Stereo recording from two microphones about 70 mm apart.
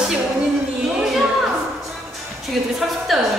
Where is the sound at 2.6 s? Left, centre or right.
Centre.